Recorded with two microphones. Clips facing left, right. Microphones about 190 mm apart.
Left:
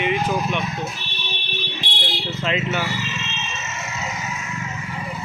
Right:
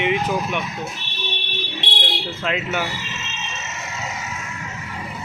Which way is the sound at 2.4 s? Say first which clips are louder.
Left 1 dB; 5° right (ahead or behind).